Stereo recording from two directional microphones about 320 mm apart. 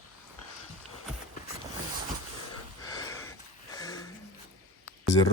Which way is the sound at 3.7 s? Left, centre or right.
Centre.